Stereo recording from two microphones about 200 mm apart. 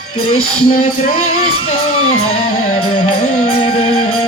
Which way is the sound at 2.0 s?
90° left.